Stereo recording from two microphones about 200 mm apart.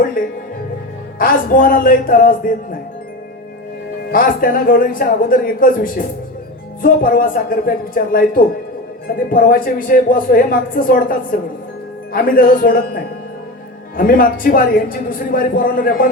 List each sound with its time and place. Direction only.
0.2 s speech: 45° left (ahead or behind)
4.1 s speech: 45° left (ahead or behind)